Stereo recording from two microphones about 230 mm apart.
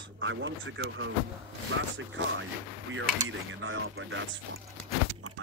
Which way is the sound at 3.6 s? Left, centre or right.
Right.